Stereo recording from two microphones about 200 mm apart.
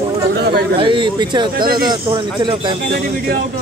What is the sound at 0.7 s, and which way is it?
Speech, 25° right (ahead or behind).